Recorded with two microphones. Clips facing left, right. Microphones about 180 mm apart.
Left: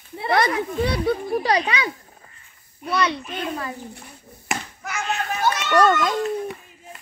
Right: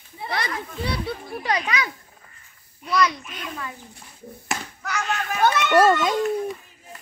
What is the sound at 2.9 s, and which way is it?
Speech, 30° left (ahead or behind).